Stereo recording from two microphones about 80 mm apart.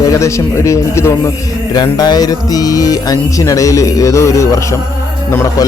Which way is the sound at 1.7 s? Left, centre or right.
Left.